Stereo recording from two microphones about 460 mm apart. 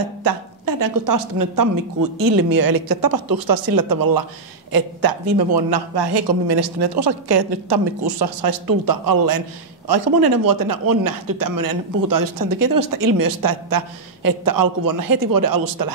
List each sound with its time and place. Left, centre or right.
0.2 s a man's voice: right